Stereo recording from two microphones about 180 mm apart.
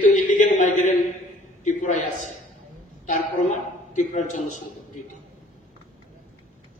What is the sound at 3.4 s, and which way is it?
A man's voice, 40° left (ahead or behind).